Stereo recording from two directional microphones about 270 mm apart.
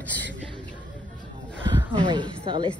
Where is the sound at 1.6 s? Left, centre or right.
Centre.